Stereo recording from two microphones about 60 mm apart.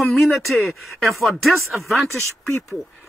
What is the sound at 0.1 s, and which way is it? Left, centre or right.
Speech, centre.